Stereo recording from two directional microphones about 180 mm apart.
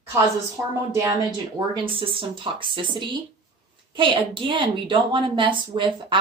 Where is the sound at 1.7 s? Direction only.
30° right (ahead or behind).